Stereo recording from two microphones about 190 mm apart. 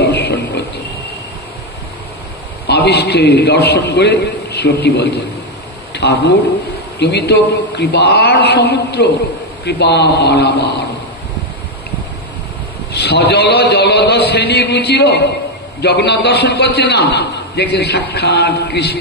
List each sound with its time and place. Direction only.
0.0 s a sound: 60° left (ahead or behind)
2.6 s a man's voice: 60° left (ahead or behind)
12.9 s a man's voice: 60° left (ahead or behind)